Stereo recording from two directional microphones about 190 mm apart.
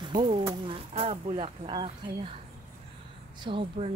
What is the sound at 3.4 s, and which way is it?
Speech, 25° right (ahead or behind).